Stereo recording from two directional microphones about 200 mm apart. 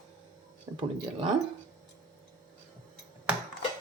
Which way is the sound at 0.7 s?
20° right (ahead or behind).